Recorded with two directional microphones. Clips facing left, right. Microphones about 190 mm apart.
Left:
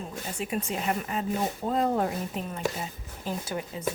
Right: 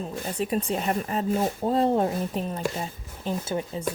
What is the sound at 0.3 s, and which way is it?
A woman's voice, 35° right (ahead or behind).